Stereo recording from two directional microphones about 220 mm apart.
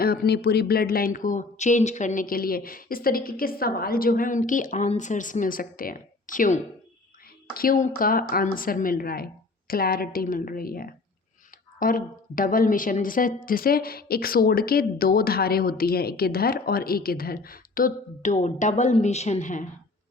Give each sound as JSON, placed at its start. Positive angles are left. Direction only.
{"t": 0.0, "sound": "a woman's voice", "side_deg": 45}